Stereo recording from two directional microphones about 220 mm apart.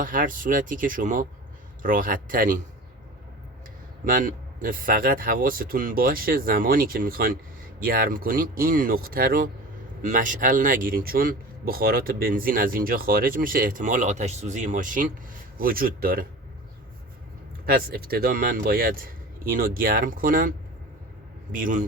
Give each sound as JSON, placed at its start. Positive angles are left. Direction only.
{"t": 0.0, "sound": "speech", "side_deg": -40}
{"t": 4.0, "sound": "speech", "side_deg": -40}
{"t": 17.7, "sound": "speech", "side_deg": -45}
{"t": 21.5, "sound": "speech", "side_deg": -35}